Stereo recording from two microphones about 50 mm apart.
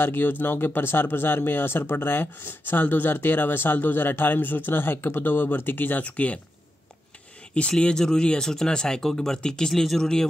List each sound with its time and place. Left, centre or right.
0.0 s speech: left
6.0 s speech: left
7.8 s speech: centre